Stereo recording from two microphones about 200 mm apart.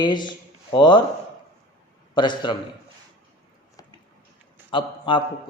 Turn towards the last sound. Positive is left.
turn(degrees=25)  # may be behind; listen again after turning